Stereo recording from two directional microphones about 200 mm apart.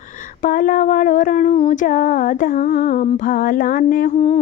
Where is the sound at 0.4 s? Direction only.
40° left (ahead or behind).